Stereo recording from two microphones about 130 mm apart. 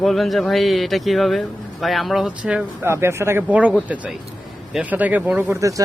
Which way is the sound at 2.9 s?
20° right (ahead or behind).